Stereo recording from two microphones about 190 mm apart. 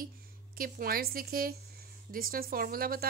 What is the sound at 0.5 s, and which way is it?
Speech, 50° right (ahead or behind).